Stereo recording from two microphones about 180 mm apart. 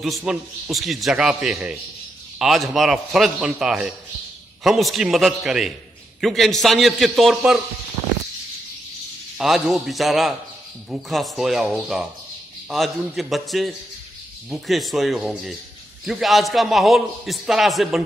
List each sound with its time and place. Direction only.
0.0 s a man's voice: centre (ahead or behind)
9.4 s a man's voice: centre (ahead or behind)